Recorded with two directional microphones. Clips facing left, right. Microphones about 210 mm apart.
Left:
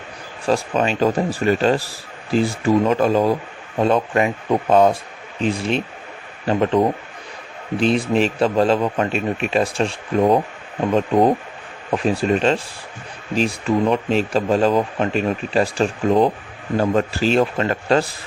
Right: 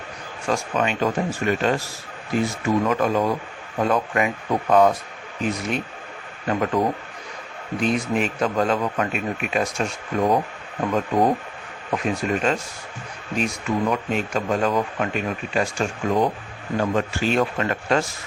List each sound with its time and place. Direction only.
0.4 s a man's voice: 30° left (ahead or behind)
12.0 s speech: 30° left (ahead or behind)